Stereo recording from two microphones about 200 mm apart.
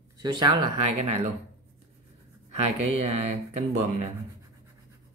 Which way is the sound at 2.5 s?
30° right (ahead or behind).